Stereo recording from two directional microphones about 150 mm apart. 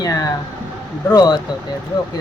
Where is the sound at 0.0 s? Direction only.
25° left (ahead or behind).